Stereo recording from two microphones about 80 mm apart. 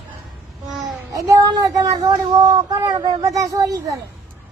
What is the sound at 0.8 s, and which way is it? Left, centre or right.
Speech, right.